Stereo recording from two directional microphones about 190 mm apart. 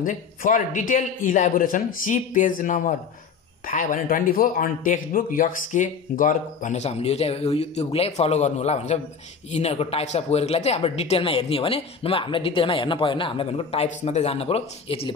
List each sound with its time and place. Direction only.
0.0 s a man's voice: 45° left (ahead or behind)